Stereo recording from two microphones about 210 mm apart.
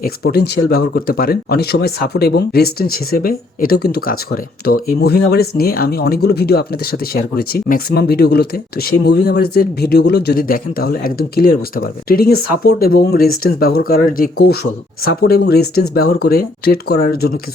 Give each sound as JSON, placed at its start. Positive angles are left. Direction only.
{"t": 0.0, "sound": "speech", "side_deg": 45}